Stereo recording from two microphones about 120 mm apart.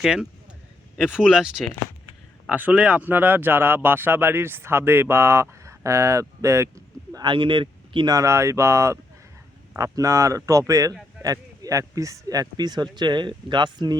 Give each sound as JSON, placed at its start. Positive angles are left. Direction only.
{"t": 0.0, "sound": "speech", "side_deg": -5}
{"t": 7.3, "sound": "speech", "side_deg": -45}
{"t": 8.1, "sound": "speech", "side_deg": -25}